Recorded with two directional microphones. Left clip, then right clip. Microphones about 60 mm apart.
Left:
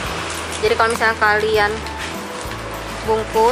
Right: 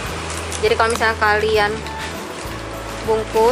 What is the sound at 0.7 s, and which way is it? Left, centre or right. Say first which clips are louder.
Speech: even; centre.